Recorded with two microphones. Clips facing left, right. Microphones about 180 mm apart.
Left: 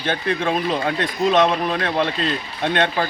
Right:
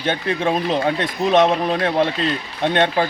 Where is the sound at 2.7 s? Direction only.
20° right (ahead or behind).